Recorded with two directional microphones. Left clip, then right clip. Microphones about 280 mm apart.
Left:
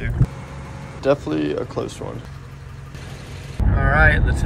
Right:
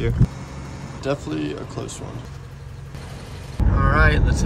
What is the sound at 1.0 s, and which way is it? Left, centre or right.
Speech, centre.